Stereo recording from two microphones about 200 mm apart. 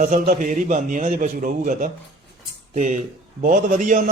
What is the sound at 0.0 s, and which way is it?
Speech, 40° right (ahead or behind).